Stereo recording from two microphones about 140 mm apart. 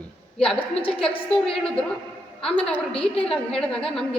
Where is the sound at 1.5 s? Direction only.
5° left (ahead or behind).